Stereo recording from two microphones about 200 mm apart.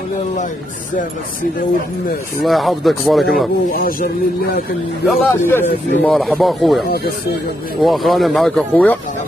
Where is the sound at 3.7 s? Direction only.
45° left (ahead or behind).